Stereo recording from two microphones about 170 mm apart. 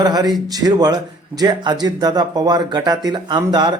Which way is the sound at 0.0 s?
25° right (ahead or behind).